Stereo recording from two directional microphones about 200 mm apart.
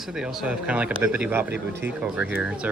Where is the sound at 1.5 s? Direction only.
60° right (ahead or behind).